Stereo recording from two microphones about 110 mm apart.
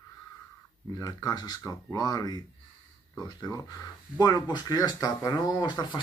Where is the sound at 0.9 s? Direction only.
35° left (ahead or behind).